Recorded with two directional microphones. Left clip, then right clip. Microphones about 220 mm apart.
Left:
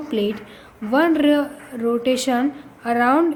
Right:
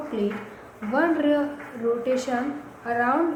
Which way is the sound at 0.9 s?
45° left (ahead or behind).